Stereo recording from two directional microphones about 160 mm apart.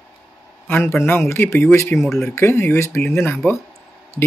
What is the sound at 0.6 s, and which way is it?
A man's voice, 15° left (ahead or behind).